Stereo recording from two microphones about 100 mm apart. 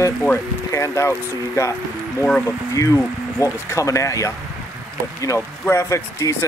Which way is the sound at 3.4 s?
30° left (ahead or behind).